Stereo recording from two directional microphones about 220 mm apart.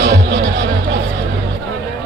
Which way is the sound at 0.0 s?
50° right (ahead or behind).